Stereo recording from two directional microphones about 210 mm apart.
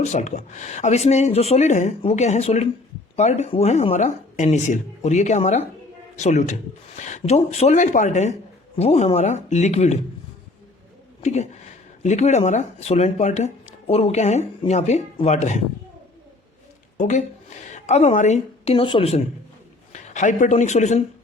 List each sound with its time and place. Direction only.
0.0 s speech: 35° left (ahead or behind)
11.2 s speech: 30° left (ahead or behind)
17.0 s speech: 35° left (ahead or behind)